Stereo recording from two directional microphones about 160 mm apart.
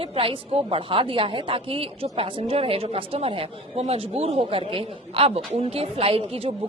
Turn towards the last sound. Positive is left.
turn(degrees=-35)  # may be behind; listen again after turning